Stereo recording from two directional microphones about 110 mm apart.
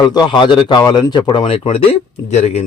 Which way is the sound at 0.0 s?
40° left (ahead or behind).